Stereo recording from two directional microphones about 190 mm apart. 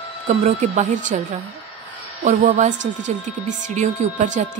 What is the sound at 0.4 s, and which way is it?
A woman's voice, 40° right (ahead or behind).